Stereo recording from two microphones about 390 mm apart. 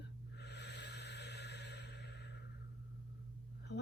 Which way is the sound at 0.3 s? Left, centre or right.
Left.